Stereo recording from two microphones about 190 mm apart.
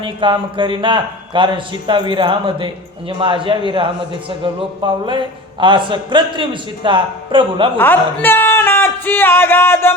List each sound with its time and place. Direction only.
0.0 s a man's voice: 25° right (ahead or behind)
7.8 s music: 10° left (ahead or behind)